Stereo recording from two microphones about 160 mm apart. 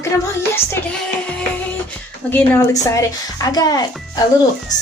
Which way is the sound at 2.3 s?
15° left (ahead or behind).